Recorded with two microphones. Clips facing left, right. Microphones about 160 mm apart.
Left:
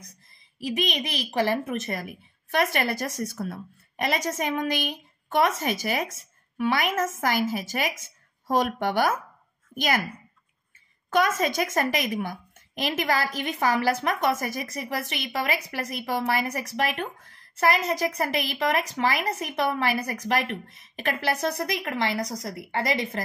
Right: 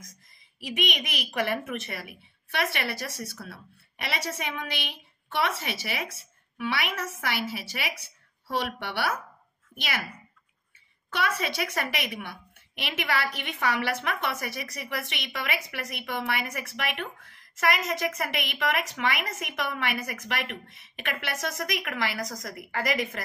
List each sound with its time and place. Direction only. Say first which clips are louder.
0.6 s a woman's voice: left 4 dB; 35° left (ahead or behind)
11.1 s a woman's voice: left 6 dB; 45° left (ahead or behind)